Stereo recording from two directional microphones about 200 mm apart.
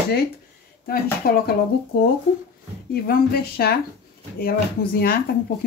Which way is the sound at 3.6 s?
50° left (ahead or behind).